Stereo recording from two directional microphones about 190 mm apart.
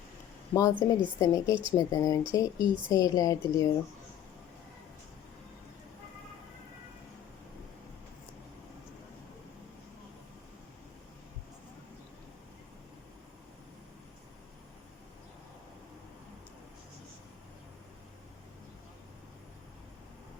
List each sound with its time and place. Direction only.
0.5 s a woman's voice: 20° left (ahead or behind)